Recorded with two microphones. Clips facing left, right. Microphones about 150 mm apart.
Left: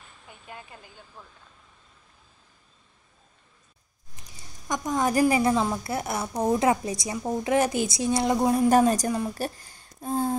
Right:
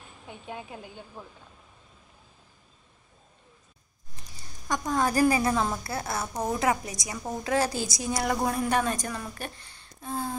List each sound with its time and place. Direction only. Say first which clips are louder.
0.3 s a woman's voice: right 5 dB; centre (ahead or behind)
4.6 s a woman's voice: left 1 dB; 15° left (ahead or behind)
8.6 s a woman's voice: left 7 dB; 40° left (ahead or behind)